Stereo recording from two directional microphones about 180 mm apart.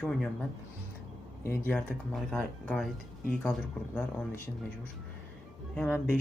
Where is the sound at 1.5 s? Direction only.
10° left (ahead or behind).